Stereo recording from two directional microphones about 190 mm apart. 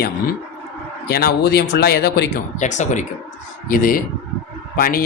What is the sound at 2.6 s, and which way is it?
A man's voice, 40° left (ahead or behind).